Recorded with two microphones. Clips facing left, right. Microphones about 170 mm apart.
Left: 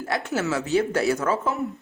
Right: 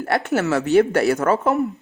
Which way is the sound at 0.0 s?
65° right (ahead or behind).